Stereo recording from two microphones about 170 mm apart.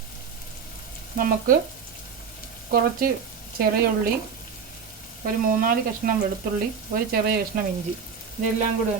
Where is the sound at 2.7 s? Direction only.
60° right (ahead or behind).